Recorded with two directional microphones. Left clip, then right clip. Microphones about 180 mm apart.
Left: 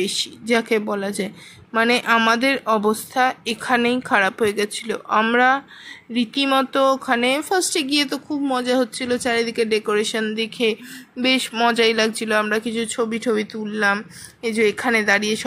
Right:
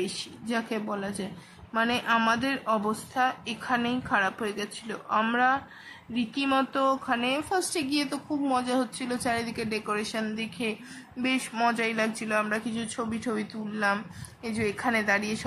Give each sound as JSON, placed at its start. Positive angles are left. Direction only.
{"t": 0.0, "sound": "speech", "side_deg": 30}